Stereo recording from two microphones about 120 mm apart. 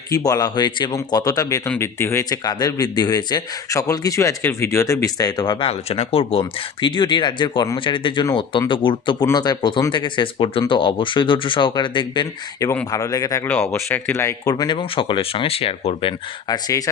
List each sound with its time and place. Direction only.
0.1 s a man's voice: 30° left (ahead or behind)
2.4 s a man's voice: 35° left (ahead or behind)
5.5 s speech: 50° left (ahead or behind)
6.4 s a man's voice: 40° left (ahead or behind)
12.9 s speech: 30° left (ahead or behind)
14.5 s speech: 40° left (ahead or behind)
16.5 s speech: 30° left (ahead or behind)